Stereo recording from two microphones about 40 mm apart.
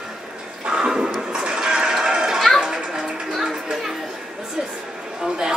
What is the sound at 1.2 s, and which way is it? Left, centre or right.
Sheep, right.